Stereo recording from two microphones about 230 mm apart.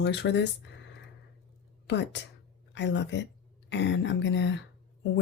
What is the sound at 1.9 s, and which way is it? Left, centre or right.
Speech, left.